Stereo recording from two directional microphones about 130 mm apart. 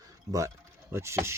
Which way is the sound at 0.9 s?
20° right (ahead or behind).